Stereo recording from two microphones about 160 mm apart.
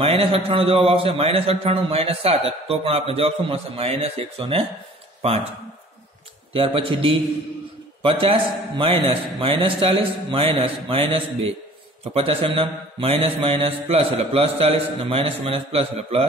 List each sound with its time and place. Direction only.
0.0 s a man's voice: 35° right (ahead or behind)
6.5 s a man's voice: 35° right (ahead or behind)